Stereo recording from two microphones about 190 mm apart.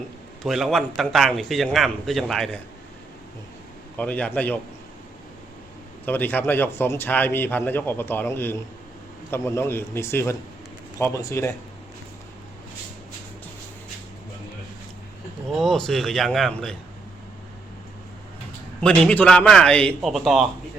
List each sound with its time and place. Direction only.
0.4 s a man's voice: centre (ahead or behind)
3.9 s a man's voice: 5° left (ahead or behind)
6.1 s a man's voice: 10° left (ahead or behind)
15.5 s a man's voice: centre (ahead or behind)
18.8 s a man's voice: 5° left (ahead or behind)